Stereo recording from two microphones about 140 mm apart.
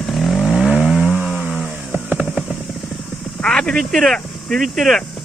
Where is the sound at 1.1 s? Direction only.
15° left (ahead or behind).